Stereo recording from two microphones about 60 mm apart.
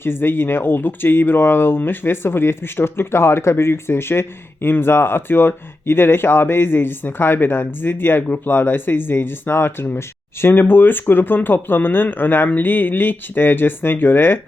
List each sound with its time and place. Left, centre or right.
0.0 s speech: left